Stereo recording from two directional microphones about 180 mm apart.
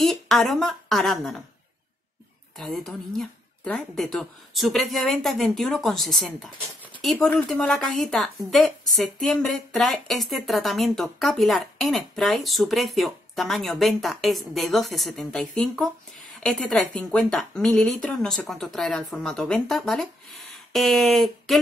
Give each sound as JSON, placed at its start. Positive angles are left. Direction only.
{"t": 0.0, "sound": "a woman's voice", "side_deg": 0}
{"t": 2.5, "sound": "a woman's voice", "side_deg": 0}